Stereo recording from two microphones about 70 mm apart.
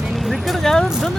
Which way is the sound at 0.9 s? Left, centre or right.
Centre.